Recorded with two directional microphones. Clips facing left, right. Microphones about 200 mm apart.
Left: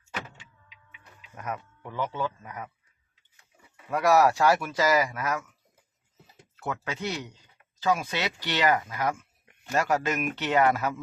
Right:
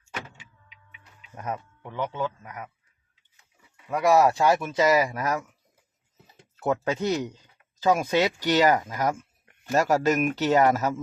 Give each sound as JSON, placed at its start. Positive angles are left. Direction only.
{"t": 1.4, "sound": "speech", "side_deg": -25}
{"t": 3.9, "sound": "speech", "side_deg": -20}
{"t": 6.6, "sound": "speech", "side_deg": -40}